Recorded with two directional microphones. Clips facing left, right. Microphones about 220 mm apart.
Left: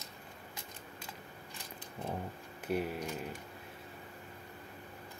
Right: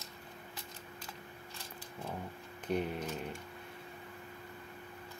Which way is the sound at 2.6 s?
5° left (ahead or behind).